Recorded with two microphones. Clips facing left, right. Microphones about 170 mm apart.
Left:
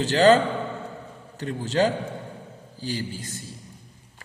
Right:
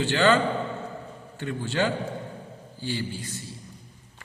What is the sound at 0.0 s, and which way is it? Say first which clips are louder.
Speech: left 4 dB; 40° left (ahead or behind).